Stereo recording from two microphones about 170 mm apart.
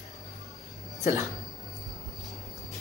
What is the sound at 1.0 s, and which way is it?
Speech, 20° right (ahead or behind).